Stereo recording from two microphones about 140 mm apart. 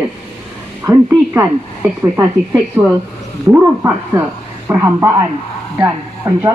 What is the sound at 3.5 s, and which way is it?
A woman's voice, 15° right (ahead or behind).